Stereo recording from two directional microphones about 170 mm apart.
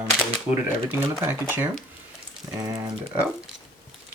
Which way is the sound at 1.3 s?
10° right (ahead or behind).